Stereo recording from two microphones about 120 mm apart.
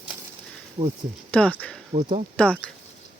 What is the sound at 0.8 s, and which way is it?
Speech, 50° right (ahead or behind).